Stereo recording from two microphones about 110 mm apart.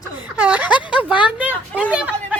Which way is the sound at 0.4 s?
10° right (ahead or behind).